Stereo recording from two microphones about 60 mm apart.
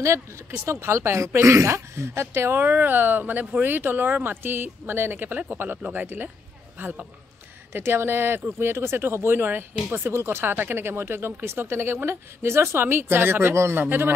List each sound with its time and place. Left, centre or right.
0.0 s speech: right
2.6 s speech: right
5.8 s speech: right
6.8 s speech: right